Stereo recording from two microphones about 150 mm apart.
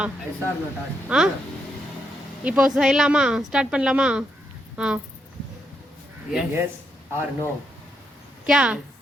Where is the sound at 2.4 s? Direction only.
5° right (ahead or behind).